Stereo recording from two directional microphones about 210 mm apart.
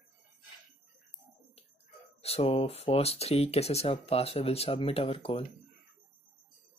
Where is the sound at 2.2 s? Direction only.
30° left (ahead or behind).